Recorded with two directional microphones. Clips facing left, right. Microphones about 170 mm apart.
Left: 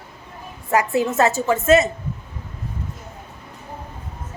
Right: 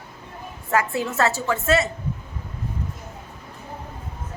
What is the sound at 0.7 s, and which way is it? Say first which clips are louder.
A woman's voice: left 4 dB; 15° left (ahead or behind).